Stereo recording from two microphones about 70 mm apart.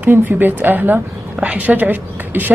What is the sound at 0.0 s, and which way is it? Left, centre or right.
Speech, right.